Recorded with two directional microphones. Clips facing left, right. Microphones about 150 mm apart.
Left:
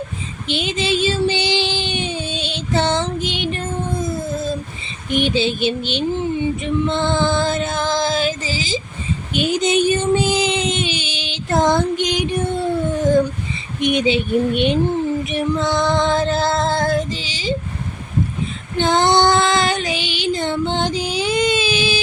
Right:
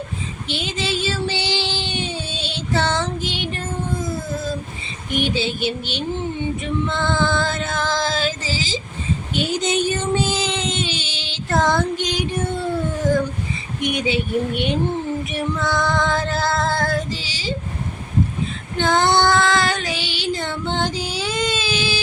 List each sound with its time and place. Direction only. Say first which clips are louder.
0.4 s child singing: left 5 dB; 20° left (ahead or behind)
5.1 s speech: left 4 dB; 20° left (ahead or behind)
6.8 s female singing: left 3 dB; 20° left (ahead or behind)
9.3 s a sound: left 4 dB; 15° left (ahead or behind)
13.8 s speech: left 4 dB; 20° left (ahead or behind)
15.3 s female singing: left 4 dB; 20° left (ahead or behind)
18.8 s female singing: left 2 dB; 20° left (ahead or behind)